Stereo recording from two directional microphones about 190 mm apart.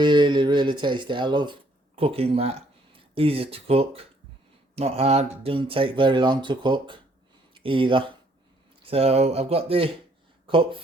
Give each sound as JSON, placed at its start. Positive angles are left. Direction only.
{"t": 0.0, "sound": "speech", "side_deg": -25}